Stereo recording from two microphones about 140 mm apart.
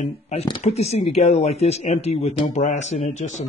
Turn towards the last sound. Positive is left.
turn(degrees=60)  # may be behind; listen again after turning